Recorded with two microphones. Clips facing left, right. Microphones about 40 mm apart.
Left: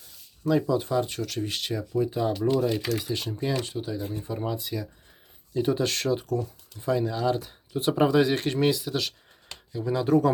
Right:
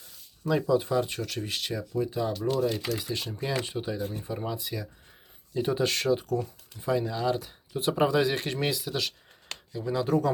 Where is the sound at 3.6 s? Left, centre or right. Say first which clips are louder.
Left 1 dB; centre.